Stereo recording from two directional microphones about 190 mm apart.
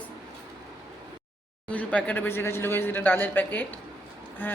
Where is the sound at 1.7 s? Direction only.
10° left (ahead or behind).